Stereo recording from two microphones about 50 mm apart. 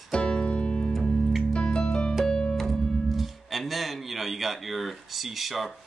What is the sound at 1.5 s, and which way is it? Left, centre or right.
Music, centre.